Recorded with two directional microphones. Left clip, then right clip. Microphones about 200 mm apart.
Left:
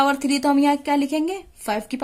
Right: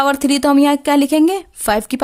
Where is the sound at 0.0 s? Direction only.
45° right (ahead or behind).